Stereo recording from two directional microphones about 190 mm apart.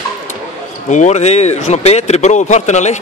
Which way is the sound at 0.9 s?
40° left (ahead or behind).